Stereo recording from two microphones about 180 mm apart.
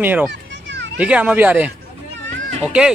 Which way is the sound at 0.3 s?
80° right.